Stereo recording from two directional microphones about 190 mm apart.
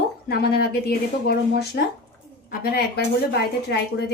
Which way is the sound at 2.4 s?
55° left (ahead or behind).